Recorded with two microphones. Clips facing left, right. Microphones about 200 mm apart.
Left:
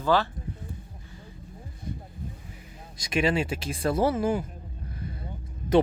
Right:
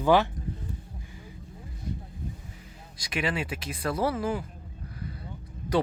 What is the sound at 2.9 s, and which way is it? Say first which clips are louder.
Speech: left 5 dB; 25° left (ahead or behind).